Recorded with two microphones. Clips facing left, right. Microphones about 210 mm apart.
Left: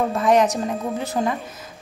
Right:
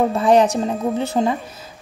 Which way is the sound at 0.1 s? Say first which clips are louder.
Right 3 dB; 30° right (ahead or behind).